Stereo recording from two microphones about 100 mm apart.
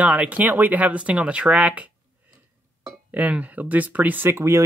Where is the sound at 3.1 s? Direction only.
15° right (ahead or behind).